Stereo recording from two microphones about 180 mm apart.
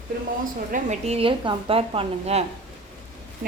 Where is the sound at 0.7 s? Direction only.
40° right (ahead or behind).